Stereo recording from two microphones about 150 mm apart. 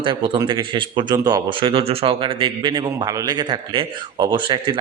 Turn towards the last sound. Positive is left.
turn(degrees=-30)  # may be behind; listen again after turning